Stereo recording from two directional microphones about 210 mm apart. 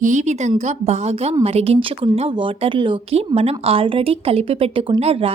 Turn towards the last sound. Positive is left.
turn(degrees=-30)  # may be behind; listen again after turning